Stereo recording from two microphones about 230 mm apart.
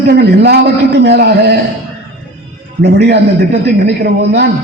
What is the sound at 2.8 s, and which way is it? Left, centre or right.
A man's voice, right.